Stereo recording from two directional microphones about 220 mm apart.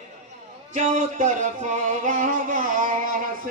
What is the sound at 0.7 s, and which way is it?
Music, 35° right (ahead or behind).